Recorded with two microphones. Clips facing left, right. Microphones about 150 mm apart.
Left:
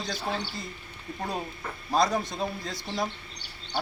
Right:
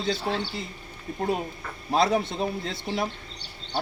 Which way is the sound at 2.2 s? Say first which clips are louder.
Right 3 dB; 25° right (ahead or behind).